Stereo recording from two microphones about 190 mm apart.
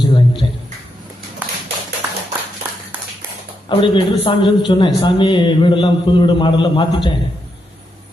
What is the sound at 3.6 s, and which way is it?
A man's voice, 25° left (ahead or behind).